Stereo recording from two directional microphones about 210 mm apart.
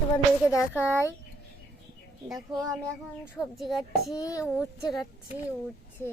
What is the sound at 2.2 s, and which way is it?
Speech, centre (ahead or behind).